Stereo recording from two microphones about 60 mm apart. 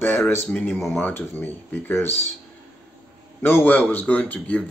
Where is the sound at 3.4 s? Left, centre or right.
Left.